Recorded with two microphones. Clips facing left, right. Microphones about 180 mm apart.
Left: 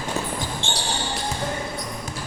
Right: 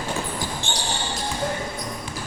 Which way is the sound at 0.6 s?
25° left (ahead or behind).